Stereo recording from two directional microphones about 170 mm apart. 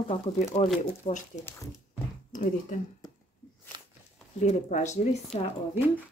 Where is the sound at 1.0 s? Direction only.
45° left (ahead or behind).